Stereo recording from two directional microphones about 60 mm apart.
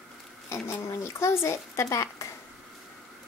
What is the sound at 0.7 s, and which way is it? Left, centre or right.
Speech, left.